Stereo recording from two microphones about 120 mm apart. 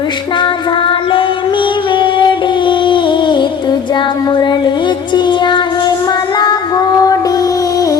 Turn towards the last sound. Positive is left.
turn(degrees=30)  # may be behind; listen again after turning